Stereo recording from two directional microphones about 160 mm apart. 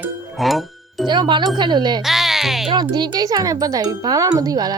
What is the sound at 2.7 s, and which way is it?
A child's voice, 30° right (ahead or behind).